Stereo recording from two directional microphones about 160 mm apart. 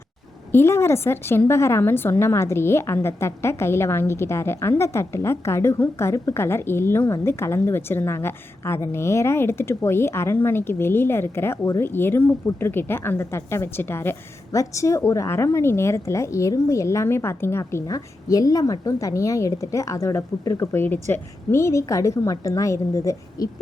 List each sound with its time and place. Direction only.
0.5 s a woman's voice: 15° left (ahead or behind)